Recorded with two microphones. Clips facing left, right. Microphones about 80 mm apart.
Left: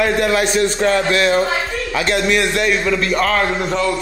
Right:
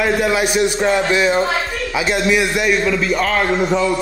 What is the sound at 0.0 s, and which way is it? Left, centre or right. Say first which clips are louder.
A man's voice: left 1 dB; centre.